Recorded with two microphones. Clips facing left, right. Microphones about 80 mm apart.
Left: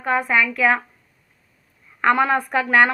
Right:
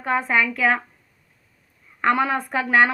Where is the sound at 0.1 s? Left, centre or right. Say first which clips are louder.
Left 2 dB; right.